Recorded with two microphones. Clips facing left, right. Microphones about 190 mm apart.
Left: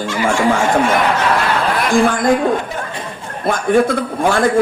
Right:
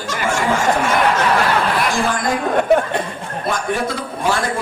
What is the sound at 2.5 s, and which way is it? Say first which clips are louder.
Speech: right 9 dB; 60° right (ahead or behind).